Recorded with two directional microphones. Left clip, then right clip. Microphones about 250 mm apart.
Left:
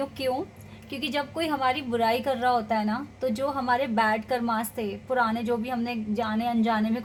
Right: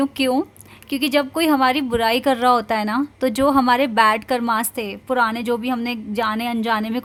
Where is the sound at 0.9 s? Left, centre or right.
Right.